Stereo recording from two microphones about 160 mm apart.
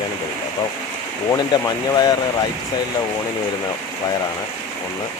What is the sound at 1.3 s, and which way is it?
Speech, 20° left (ahead or behind).